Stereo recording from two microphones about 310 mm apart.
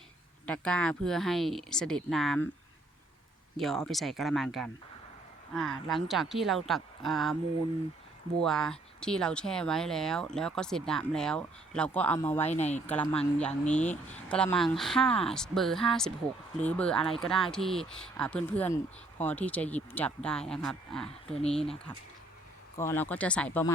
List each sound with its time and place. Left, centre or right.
0.4 s speech: centre
3.6 s speech: centre
5.9 s speech: centre
8.4 s speech: centre
12.5 s speech: left
12.9 s speech: centre